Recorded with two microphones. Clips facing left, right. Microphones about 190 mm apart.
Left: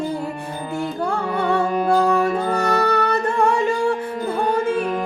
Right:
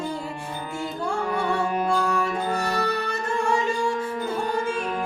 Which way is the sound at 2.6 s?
60° left (ahead or behind).